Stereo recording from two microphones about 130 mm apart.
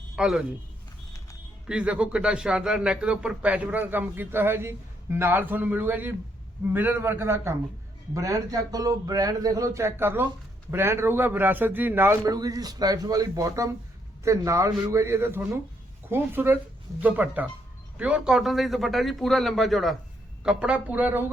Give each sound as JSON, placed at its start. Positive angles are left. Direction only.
{"t": 0.2, "sound": "a man's voice", "side_deg": -5}
{"t": 1.6, "sound": "a man's voice", "side_deg": -10}